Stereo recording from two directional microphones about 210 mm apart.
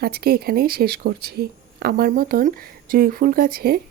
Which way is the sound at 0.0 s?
45° right (ahead or behind).